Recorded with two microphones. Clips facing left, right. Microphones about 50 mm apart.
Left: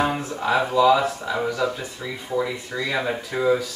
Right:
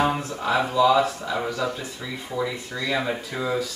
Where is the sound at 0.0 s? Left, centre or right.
Centre.